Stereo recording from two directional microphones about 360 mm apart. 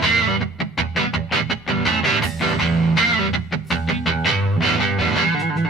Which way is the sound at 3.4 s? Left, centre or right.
Centre.